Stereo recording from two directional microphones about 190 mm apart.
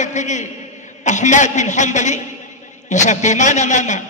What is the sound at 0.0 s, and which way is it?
A man's voice, 40° left (ahead or behind).